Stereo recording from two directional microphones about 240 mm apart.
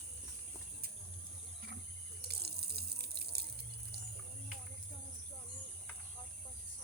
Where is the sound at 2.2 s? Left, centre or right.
Right.